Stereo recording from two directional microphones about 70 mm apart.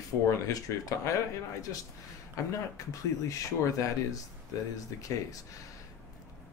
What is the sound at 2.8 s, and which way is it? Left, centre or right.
Speech, left.